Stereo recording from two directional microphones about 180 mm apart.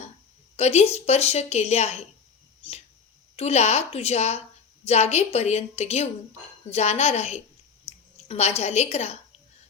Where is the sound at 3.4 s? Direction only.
35° left (ahead or behind).